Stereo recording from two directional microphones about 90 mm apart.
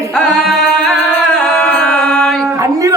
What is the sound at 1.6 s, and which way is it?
Music, 10° left (ahead or behind).